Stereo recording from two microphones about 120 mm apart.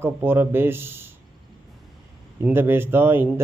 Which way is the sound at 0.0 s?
20° right (ahead or behind).